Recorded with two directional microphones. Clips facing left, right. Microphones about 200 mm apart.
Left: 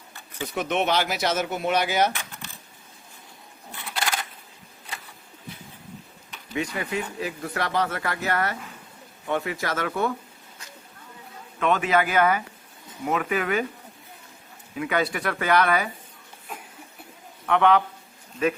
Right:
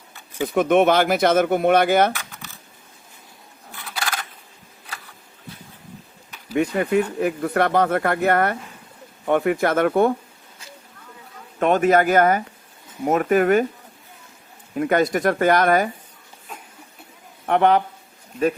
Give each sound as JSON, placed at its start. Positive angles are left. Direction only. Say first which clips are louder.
{"t": 0.4, "sound": "speech", "louder": "right 9 dB", "side_deg": -50}
{"t": 4.0, "sound": "coin", "louder": "even", "side_deg": 10}
{"t": 6.6, "sound": "speech", "louder": "right 9 dB", "side_deg": -55}
{"t": 11.6, "sound": "speech", "louder": "right 6 dB", "side_deg": -45}
{"t": 14.8, "sound": "speech", "louder": "right 7 dB", "side_deg": -45}
{"t": 17.4, "sound": "a man's voice", "louder": "right 3 dB", "side_deg": -40}